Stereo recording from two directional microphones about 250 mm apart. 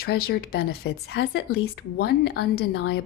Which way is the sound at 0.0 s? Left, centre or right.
Left.